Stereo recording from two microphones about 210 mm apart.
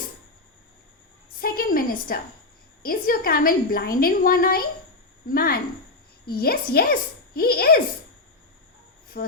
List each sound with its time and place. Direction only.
1.4 s a sound: 45° left (ahead or behind)
2.8 s a woman's voice: 45° left (ahead or behind)
9.2 s speech: 40° left (ahead or behind)